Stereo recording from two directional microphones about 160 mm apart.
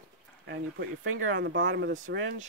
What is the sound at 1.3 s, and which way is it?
Speech, 90° right.